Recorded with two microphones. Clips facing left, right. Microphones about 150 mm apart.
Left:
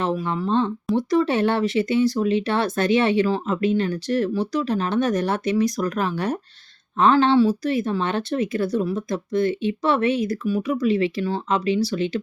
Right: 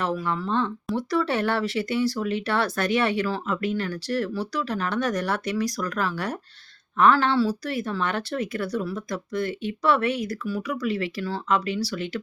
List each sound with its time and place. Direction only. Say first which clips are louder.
0.0 s speech: left 3 dB; 20° left (ahead or behind)